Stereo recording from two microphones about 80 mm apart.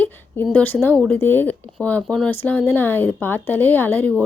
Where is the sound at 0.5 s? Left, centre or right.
Left.